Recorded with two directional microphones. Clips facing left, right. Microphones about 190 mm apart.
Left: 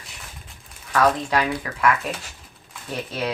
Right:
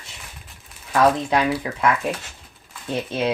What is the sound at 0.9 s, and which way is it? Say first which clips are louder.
Speech: right 2 dB; 25° right (ahead or behind).